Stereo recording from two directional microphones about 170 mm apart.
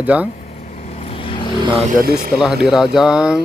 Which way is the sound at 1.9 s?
60° right (ahead or behind).